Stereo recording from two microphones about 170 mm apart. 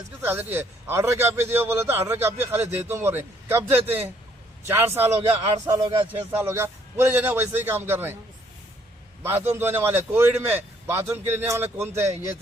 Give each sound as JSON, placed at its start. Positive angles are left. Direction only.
{"t": 0.2, "sound": "a man's voice", "side_deg": -15}
{"t": 6.1, "sound": "a man's voice", "side_deg": -10}
{"t": 9.2, "sound": "a man's voice", "side_deg": -15}